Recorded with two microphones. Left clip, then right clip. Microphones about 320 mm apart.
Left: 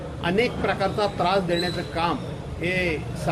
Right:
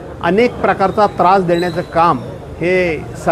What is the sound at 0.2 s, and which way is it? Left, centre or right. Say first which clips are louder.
A man's voice: right 10 dB; right.